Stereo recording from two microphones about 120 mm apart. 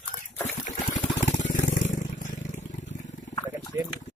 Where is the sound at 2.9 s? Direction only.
80° left.